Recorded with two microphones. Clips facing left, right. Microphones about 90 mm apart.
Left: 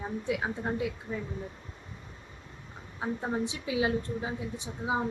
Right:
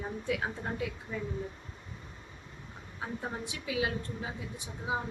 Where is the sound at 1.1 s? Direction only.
35° left (ahead or behind).